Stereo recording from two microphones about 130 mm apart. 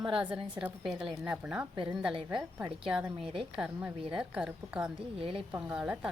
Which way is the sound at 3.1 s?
45° right (ahead or behind).